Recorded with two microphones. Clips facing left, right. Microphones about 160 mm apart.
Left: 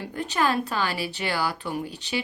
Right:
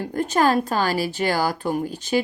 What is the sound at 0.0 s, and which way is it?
Speech, 45° right (ahead or behind).